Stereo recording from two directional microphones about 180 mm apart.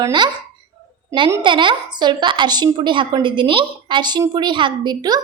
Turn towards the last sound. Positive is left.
turn(degrees=-25)  # may be behind; listen again after turning